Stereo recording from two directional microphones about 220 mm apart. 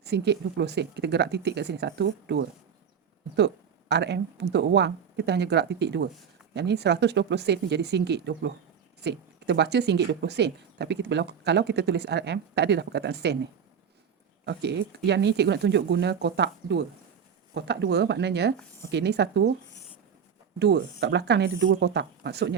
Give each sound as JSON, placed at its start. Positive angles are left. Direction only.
{"t": 0.0, "sound": "speech", "side_deg": -50}
{"t": 20.6, "sound": "speech", "side_deg": -50}